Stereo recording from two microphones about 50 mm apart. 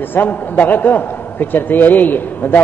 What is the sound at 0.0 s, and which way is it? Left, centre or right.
A man's voice, left.